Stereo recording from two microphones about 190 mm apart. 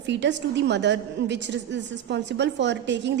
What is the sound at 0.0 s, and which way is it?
A woman's voice, 70° right (ahead or behind).